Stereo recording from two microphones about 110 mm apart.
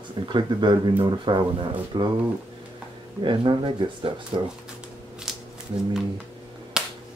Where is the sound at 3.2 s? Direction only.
45° right (ahead or behind).